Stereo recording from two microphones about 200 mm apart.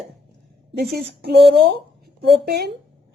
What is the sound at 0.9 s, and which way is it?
A woman's voice, 55° right (ahead or behind).